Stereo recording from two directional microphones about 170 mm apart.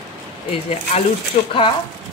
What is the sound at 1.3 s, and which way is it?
Speech, 35° left (ahead or behind).